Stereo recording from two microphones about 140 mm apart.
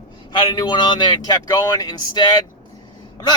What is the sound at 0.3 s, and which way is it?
Speech, 35° left (ahead or behind).